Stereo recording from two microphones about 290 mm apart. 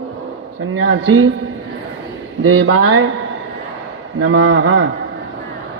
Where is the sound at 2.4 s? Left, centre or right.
Right.